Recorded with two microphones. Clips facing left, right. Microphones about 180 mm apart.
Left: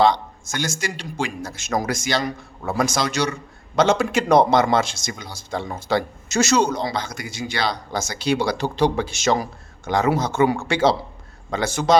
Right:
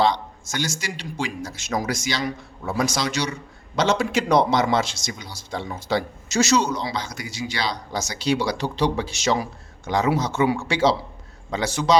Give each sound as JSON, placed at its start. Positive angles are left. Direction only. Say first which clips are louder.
{"t": 0.0, "sound": "speech", "louder": "left 3 dB", "side_deg": 50}